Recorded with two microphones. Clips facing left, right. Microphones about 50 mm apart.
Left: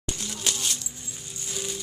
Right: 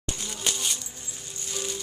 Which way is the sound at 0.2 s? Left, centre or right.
Centre.